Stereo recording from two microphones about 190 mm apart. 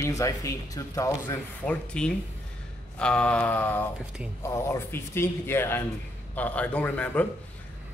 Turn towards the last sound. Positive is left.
turn(degrees=5)  # may be behind; listen again after turning